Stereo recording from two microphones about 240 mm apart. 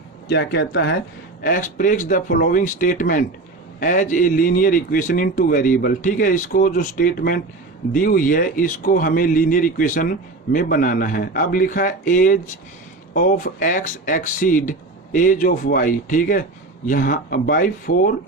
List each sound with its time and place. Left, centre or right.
0.3 s a man's voice: left
1.4 s speech: left